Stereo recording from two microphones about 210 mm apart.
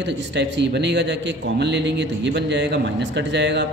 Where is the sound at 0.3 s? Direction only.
55° right (ahead or behind).